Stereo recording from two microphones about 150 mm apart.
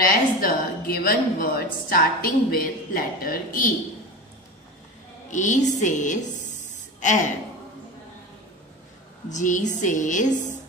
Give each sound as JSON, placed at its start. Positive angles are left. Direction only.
{"t": 0.0, "sound": "a woman's voice", "side_deg": 75}
{"t": 5.3, "sound": "a woman's voice", "side_deg": 55}
{"t": 9.3, "sound": "a woman's voice", "side_deg": 55}